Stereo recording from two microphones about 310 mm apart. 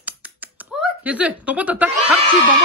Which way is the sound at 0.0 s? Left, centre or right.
Centre.